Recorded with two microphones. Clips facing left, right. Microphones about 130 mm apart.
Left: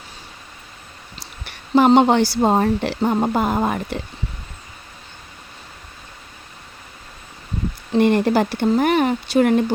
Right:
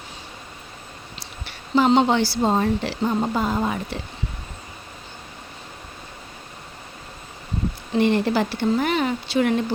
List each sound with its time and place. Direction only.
1.5 s speech: 50° left (ahead or behind)
7.9 s speech: 50° left (ahead or behind)